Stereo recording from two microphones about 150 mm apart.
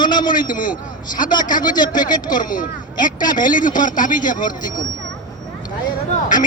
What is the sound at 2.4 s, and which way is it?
Speech, 65° left (ahead or behind).